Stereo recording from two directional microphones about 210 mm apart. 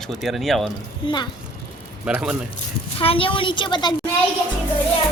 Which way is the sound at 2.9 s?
25° left (ahead or behind).